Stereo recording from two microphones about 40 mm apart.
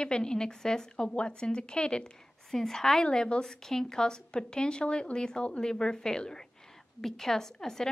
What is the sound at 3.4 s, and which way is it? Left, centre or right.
A woman's voice, centre.